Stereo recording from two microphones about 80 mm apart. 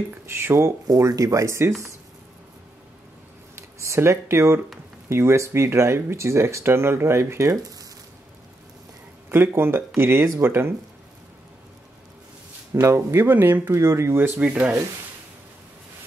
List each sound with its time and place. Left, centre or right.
0.3 s speech: right
0.8 s speech: right
3.5 s speech: right
9.3 s speech: right
12.7 s speech: right; by 14.8 s centre